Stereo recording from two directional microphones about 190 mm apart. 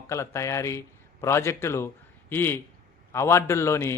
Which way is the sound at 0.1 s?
15° left (ahead or behind).